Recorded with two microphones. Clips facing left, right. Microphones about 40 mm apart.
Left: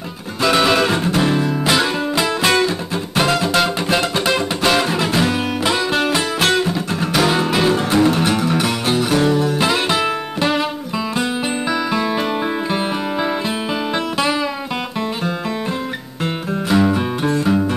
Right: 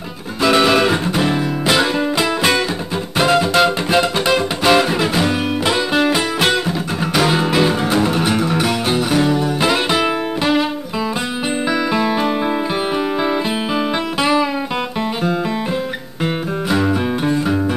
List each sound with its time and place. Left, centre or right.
0.4 s music: centre
11.9 s music: centre
16.6 s music: centre